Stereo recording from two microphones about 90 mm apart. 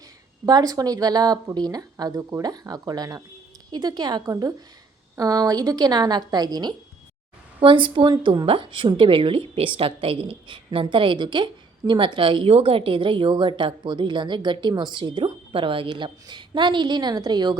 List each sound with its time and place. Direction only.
0.4 s speech: 45° right (ahead or behind)
5.1 s speech: 40° right (ahead or behind)
7.6 s a woman's voice: 70° right (ahead or behind); by 17.6 s 50° right (ahead or behind)